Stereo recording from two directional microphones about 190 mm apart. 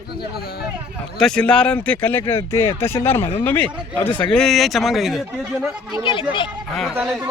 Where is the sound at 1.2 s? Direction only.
5° left (ahead or behind).